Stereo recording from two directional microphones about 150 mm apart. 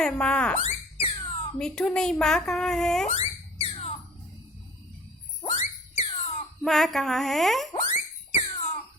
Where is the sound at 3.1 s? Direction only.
40° left (ahead or behind).